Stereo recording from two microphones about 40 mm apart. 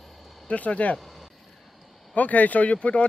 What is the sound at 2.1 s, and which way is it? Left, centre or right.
Speech, left.